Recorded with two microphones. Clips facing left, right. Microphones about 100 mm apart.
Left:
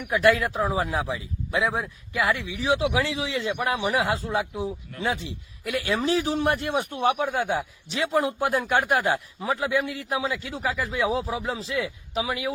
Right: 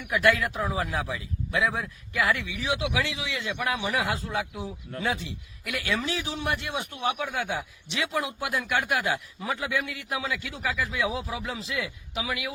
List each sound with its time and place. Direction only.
0.0 s a man's voice: 30° left (ahead or behind)